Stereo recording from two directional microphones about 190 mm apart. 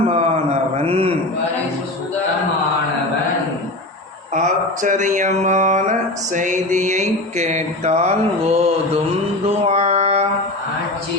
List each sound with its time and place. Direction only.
0.1 s a sound: 35° right (ahead or behind)
4.4 s mantra: 40° right (ahead or behind)
9.6 s music: 35° right (ahead or behind)